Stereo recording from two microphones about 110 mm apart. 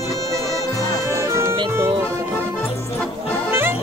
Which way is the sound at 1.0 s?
25° right (ahead or behind).